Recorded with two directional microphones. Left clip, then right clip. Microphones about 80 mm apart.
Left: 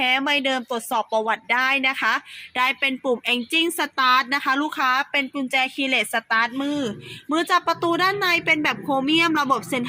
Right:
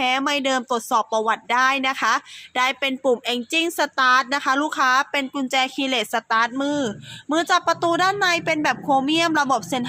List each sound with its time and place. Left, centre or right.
0.0 s speech: right